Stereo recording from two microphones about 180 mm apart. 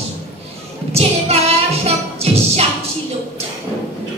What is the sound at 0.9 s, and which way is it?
Music, 35° right (ahead or behind).